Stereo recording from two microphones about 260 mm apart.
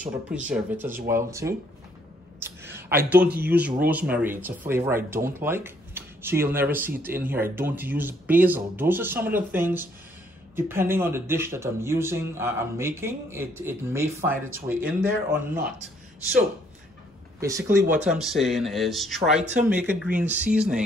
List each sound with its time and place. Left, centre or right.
0.5 s speech: centre
17.4 s speech: centre